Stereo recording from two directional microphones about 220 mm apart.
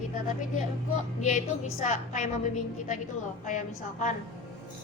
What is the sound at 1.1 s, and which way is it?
A woman's voice, 30° left (ahead or behind).